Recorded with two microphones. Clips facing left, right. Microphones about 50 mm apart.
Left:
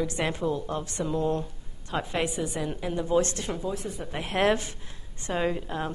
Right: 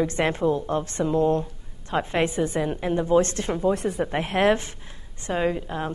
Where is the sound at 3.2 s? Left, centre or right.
Right.